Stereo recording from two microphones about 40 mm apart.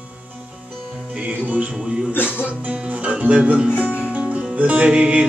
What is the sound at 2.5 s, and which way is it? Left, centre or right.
Speech, right.